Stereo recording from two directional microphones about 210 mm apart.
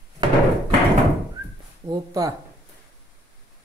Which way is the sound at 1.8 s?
15° right (ahead or behind).